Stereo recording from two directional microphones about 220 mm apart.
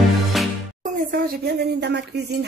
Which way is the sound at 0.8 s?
40° right (ahead or behind).